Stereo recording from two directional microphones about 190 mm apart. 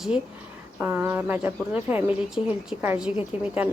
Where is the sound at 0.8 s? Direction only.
10° right (ahead or behind).